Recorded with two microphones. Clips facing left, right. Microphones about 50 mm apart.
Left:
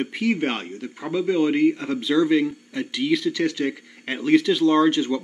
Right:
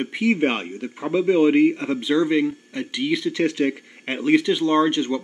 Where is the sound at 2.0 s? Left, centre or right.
Centre.